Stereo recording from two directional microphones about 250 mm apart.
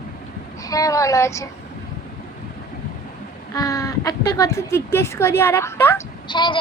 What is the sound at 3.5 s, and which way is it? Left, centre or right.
Speech, centre.